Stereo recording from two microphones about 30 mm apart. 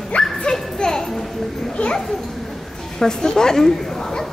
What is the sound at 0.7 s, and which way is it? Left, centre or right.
Music, left.